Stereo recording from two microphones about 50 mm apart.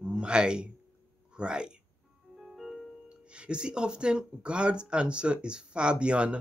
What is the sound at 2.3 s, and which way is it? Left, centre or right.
Music, centre.